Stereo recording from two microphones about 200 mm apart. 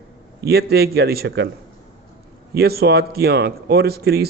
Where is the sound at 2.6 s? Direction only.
50° right (ahead or behind).